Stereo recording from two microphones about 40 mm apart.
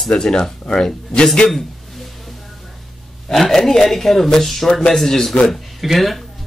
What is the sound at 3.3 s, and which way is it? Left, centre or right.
A woman's voice, centre.